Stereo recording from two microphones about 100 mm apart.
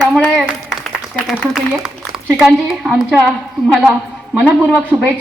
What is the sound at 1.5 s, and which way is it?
A woman's voice, 10° right (ahead or behind).